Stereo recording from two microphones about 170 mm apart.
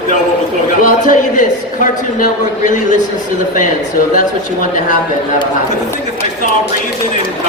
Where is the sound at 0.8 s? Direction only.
50° left (ahead or behind).